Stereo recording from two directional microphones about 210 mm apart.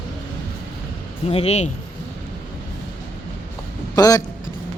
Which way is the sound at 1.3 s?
30° left (ahead or behind).